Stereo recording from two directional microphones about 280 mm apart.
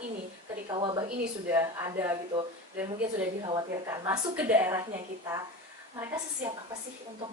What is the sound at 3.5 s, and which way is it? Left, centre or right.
A woman's voice, centre.